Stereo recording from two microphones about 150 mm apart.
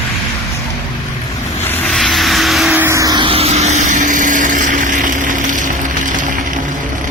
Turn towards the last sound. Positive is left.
turn(degrees=-60)  # may be behind; listen again after turning